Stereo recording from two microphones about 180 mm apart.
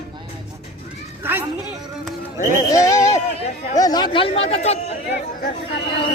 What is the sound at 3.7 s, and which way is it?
A woman's voice, 20° left (ahead or behind).